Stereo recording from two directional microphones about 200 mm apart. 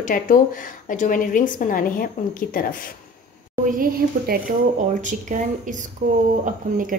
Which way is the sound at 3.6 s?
45° right (ahead or behind).